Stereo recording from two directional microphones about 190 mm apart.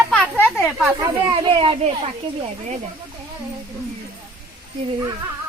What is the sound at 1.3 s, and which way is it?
Speech, 25° right (ahead or behind).